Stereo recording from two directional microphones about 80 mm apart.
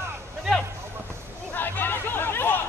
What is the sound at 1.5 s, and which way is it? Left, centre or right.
Chatter, left.